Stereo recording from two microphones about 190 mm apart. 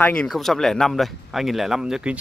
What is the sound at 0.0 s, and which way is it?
Speech, 5° left (ahead or behind).